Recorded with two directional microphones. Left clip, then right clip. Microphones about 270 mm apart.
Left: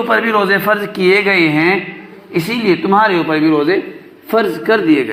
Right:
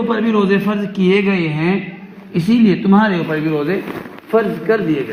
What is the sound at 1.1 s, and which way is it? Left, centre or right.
Speech, left.